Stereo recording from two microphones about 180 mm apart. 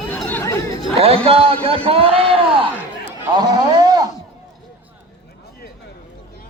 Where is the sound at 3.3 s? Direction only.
25° right (ahead or behind).